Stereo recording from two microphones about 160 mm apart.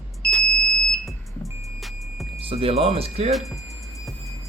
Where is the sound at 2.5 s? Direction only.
35° right (ahead or behind).